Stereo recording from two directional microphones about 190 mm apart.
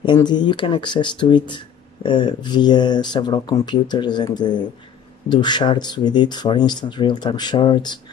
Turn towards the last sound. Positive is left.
turn(degrees=25)  # may be behind; listen again after turning